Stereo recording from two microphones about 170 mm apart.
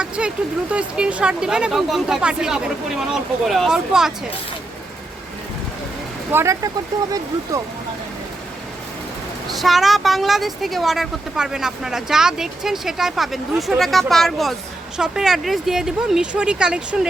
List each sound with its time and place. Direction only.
0.0 s a woman's voice: 5° right (ahead or behind)
6.3 s speech: 15° right (ahead or behind)
9.5 s a woman's voice: centre (ahead or behind)